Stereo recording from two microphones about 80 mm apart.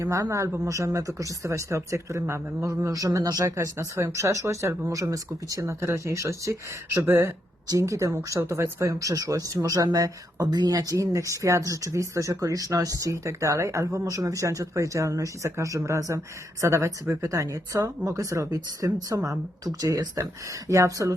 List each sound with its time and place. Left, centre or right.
0.0 s speech: right
2.8 s speech: right
3.5 s speech: right